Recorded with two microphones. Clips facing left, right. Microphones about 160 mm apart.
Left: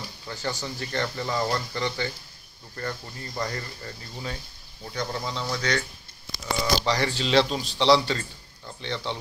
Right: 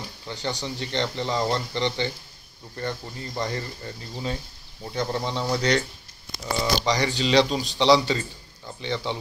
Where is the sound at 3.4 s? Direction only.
20° right (ahead or behind).